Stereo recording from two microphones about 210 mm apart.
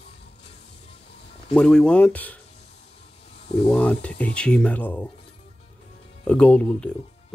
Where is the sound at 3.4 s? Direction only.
25° left (ahead or behind).